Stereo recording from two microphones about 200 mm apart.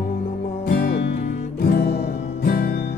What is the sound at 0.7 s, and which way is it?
Music, 50° left (ahead or behind).